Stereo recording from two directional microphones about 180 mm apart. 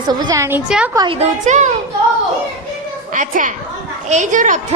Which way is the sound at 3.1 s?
45° right (ahead or behind).